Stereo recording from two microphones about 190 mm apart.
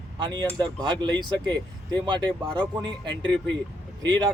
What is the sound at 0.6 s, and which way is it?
Speech, 25° right (ahead or behind).